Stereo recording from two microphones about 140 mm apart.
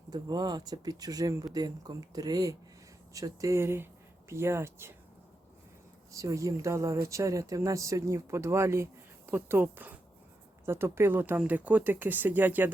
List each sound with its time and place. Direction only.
0.1 s speech: 30° right (ahead or behind)
6.1 s speech: 20° right (ahead or behind)